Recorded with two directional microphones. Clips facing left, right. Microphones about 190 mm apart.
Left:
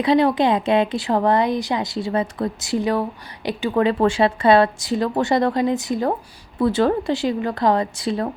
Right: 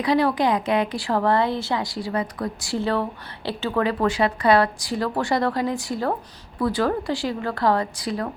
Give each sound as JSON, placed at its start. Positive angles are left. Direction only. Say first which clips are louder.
{"t": 0.0, "sound": "speech", "louder": "left 3 dB", "side_deg": 20}